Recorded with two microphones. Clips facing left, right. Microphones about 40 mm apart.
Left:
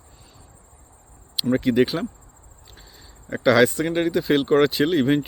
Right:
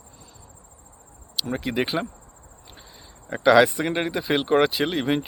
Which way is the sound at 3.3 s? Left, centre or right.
Centre.